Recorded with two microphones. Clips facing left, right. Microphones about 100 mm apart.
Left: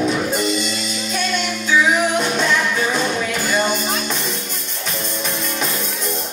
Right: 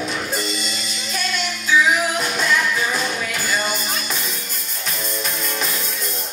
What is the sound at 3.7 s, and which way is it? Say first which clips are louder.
Music: left 4 dB; centre (ahead or behind).